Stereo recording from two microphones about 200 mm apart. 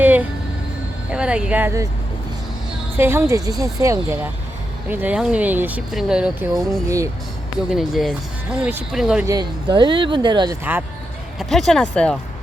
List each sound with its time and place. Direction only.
0.0 s vehicle: 10° right (ahead or behind)
1.1 s speech: 5° right (ahead or behind)
3.0 s speech: 10° right (ahead or behind)
6.8 s speech: 15° right (ahead or behind)
7.7 s speech: centre (ahead or behind)
9.2 s speech: 20° right (ahead or behind)
11.3 s speech: centre (ahead or behind)